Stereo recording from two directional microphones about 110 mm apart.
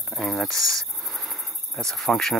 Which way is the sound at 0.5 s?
30° right (ahead or behind).